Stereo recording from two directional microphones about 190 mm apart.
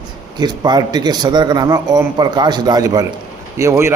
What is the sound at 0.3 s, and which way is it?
A man's voice, 20° right (ahead or behind).